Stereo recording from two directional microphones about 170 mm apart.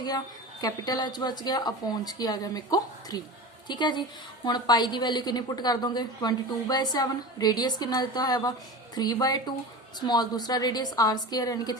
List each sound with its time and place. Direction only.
0.6 s a woman's voice: 25° left (ahead or behind)